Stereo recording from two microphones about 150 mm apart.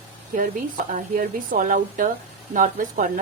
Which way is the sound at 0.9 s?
65° right (ahead or behind).